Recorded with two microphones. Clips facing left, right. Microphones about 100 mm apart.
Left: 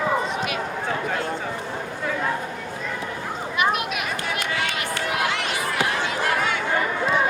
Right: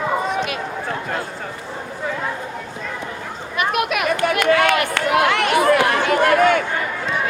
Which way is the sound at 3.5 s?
60° right (ahead or behind).